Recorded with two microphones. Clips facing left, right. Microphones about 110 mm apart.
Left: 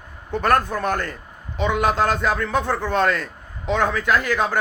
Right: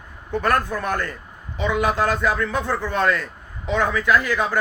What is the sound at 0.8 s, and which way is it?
A man's voice, 65° left (ahead or behind).